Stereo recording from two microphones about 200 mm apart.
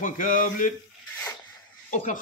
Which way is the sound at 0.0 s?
40° left (ahead or behind).